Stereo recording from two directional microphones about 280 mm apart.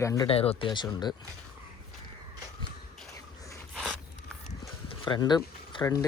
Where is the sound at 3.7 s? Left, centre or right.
Centre.